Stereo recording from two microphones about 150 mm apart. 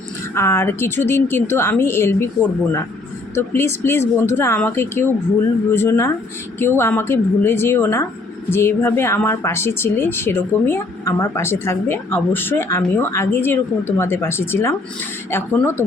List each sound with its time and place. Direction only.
0.3 s a woman's voice: 15° left (ahead or behind)